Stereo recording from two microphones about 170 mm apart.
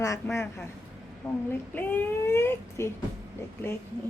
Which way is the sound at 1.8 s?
10° left (ahead or behind).